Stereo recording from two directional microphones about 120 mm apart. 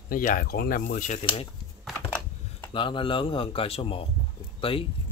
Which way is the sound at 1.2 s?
50° left (ahead or behind).